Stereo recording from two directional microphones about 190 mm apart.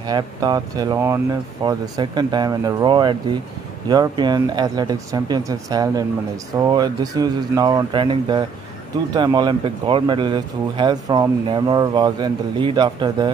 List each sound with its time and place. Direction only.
0.0 s speech: 20° right (ahead or behind)